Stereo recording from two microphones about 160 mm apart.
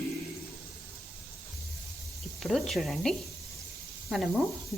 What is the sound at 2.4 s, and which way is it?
Speech, centre (ahead or behind).